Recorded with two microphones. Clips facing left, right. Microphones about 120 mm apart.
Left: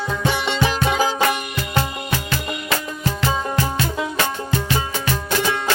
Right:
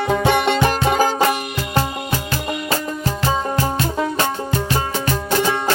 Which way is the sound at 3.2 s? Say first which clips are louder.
Right 2 dB; 40° right (ahead or behind).